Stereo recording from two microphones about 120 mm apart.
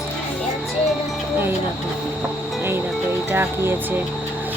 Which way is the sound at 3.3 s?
20° right (ahead or behind).